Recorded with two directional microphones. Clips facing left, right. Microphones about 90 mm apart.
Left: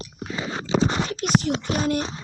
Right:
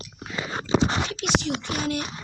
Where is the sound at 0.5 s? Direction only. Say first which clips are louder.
Even; 40° right (ahead or behind).